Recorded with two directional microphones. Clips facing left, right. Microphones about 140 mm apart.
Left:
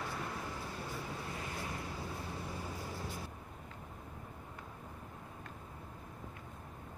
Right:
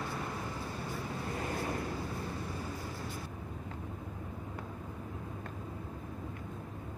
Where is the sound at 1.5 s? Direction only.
50° right (ahead or behind).